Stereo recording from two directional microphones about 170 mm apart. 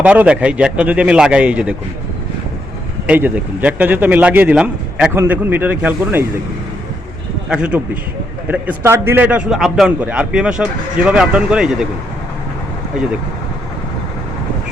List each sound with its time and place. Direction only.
0.0 s a man's voice: 10° right (ahead or behind)
3.1 s a man's voice: 10° right (ahead or behind)
7.5 s a man's voice: 5° right (ahead or behind)